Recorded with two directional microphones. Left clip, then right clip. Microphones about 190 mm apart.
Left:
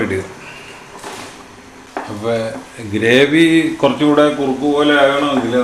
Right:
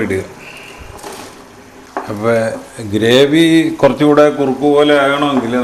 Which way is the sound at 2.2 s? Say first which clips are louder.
Right 5 dB; 40° right (ahead or behind).